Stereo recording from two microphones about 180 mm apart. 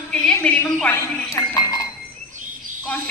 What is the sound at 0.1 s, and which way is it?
Speech, 5° left (ahead or behind).